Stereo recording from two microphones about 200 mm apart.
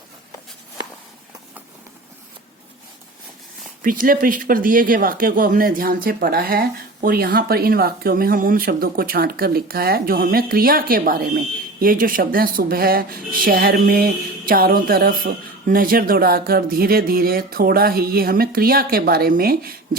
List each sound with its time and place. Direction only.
3.8 s speech: 45° right (ahead or behind)